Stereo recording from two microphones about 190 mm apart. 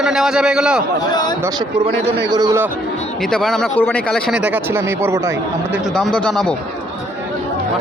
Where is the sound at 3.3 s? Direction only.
5° left (ahead or behind); by 5.8 s 15° right (ahead or behind).